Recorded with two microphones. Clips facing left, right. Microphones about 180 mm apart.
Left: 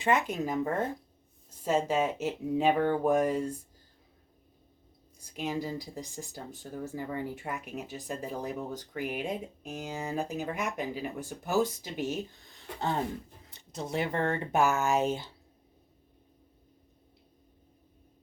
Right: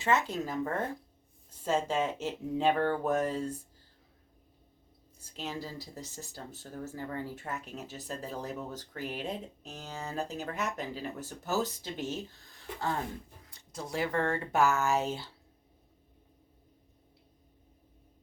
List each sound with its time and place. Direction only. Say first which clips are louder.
0.0 s speech: left 2 dB; 15° left (ahead or behind)
5.4 s speech: left 6 dB; 15° left (ahead or behind)
13.5 s speech: left 3 dB; 20° left (ahead or behind)